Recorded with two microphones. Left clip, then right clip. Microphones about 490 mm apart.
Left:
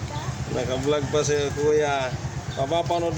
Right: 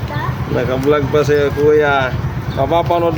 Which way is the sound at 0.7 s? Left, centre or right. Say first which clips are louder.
Right 10 dB; left.